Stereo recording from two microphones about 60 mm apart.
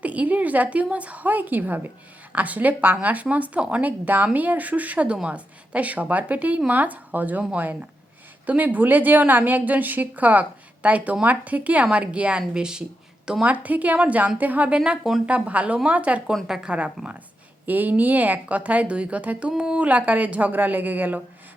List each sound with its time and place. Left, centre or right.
0.0 s speech: right
13.4 s speech: right
19.8 s speech: right